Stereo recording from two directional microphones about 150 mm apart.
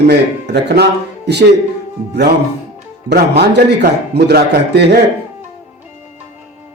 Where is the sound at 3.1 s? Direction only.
90° right.